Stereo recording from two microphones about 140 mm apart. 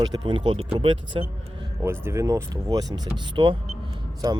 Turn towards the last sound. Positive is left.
turn(degrees=-25)  # may be behind; listen again after turning